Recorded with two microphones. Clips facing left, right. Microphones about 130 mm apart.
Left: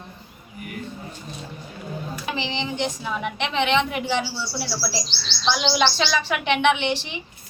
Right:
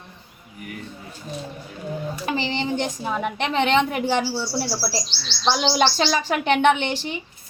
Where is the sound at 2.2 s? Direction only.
45° right (ahead or behind).